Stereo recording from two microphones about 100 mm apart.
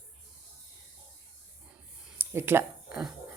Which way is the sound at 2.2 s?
25° right (ahead or behind).